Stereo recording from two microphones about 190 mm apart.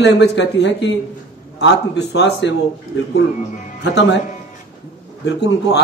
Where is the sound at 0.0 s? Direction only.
65° left (ahead or behind).